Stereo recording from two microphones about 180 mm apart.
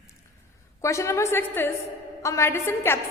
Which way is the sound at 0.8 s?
15° left (ahead or behind).